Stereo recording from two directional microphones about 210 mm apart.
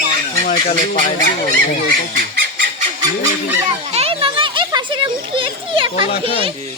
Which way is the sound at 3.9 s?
30° right (ahead or behind).